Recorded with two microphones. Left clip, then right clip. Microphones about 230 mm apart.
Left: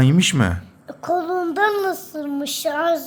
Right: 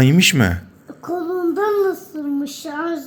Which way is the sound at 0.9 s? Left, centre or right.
Left.